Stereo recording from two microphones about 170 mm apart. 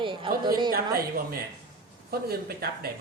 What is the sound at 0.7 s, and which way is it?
Speech, 60° right (ahead or behind).